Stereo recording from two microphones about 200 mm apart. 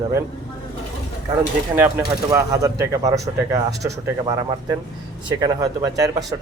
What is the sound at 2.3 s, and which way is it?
Speech, 15° right (ahead or behind).